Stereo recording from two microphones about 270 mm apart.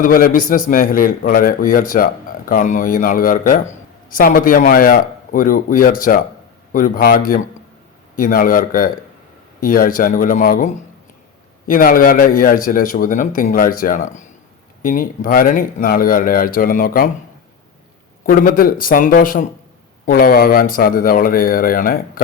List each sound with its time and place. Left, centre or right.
0.0 s a man's voice: left
18.2 s a man's voice: left